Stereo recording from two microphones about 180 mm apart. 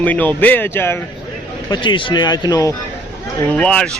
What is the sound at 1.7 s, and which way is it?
A man's voice, 25° left (ahead or behind).